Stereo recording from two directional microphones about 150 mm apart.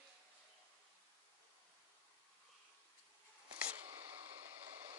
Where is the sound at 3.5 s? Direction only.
35° right (ahead or behind).